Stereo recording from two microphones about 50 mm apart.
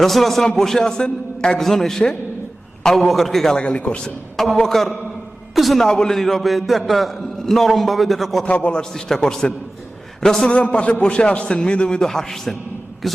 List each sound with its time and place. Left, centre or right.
0.0 s a man's voice: centre
3.6 s a man's voice: left
4.0 s a man's voice: centre
8.4 s a man's voice: left
8.9 s a man's voice: centre
10.5 s a man's voice: left; by 13.2 s centre